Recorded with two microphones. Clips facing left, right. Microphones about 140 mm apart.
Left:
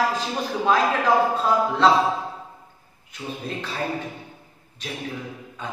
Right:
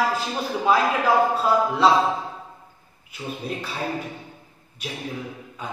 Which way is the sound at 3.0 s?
5° right (ahead or behind).